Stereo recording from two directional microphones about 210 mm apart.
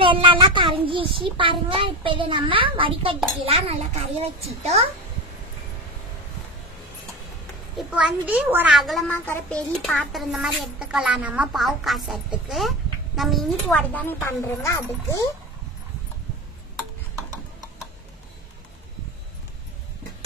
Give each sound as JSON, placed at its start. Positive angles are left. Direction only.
{"t": 0.0, "sound": "a child's voice", "side_deg": -25}
{"t": 7.7, "sound": "a child's voice", "side_deg": -5}